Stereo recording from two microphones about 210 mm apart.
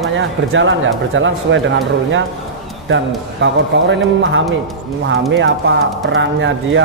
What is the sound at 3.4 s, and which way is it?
A man's voice, 60° right (ahead or behind).